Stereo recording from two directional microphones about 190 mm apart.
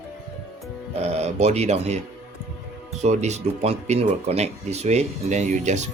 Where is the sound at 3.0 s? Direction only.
35° right (ahead or behind).